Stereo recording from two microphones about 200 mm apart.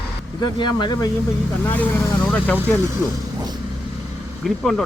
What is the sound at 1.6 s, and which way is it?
Speech, 10° left (ahead or behind).